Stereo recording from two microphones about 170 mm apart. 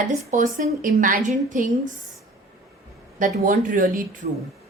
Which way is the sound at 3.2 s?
50° right (ahead or behind).